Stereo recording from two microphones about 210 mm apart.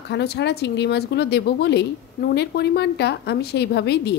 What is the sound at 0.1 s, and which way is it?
A woman's voice, 50° left (ahead or behind).